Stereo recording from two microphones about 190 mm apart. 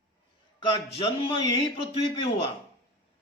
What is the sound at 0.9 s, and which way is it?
A man's voice, 30° left (ahead or behind).